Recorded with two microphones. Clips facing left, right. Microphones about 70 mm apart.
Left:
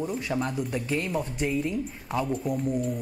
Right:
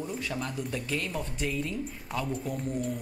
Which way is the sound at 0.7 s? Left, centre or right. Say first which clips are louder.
Left 4 dB; centre.